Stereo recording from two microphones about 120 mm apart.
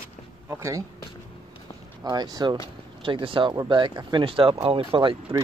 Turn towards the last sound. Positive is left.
turn(degrees=-40)  # may be behind; listen again after turning